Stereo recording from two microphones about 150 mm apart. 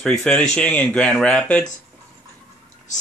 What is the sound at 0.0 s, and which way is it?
Speech, 5° left (ahead or behind).